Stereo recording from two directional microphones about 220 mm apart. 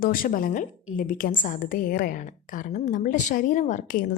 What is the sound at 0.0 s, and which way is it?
A woman's voice, 40° left (ahead or behind).